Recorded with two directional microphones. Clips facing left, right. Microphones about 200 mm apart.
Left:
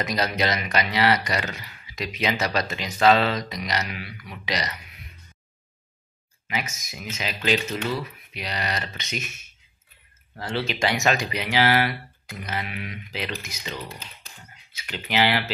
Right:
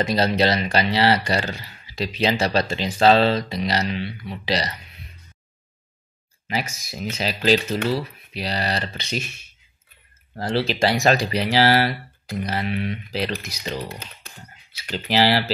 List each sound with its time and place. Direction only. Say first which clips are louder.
0.0 s speech: right 5 dB; 30° right (ahead or behind)
6.4 s speech: right 4 dB; 35° right (ahead or behind)